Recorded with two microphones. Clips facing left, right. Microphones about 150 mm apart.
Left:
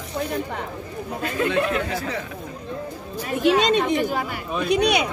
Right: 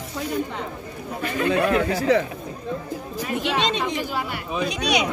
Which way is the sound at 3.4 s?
45° left (ahead or behind).